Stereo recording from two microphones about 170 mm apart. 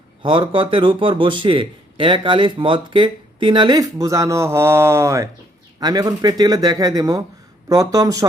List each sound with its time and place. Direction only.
0.2 s speech: 25° right (ahead or behind)